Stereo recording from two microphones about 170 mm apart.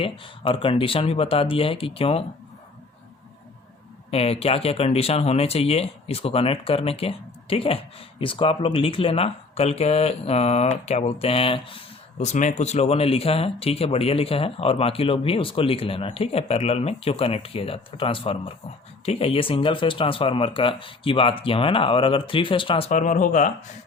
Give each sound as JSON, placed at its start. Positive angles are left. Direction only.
{"t": 0.0, "sound": "speech", "side_deg": 30}
{"t": 4.1, "sound": "speech", "side_deg": 35}
{"t": 12.2, "sound": "speech", "side_deg": 45}
{"t": 22.9, "sound": "speech", "side_deg": 50}